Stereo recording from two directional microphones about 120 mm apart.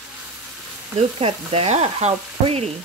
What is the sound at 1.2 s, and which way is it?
Frying, 55° right (ahead or behind).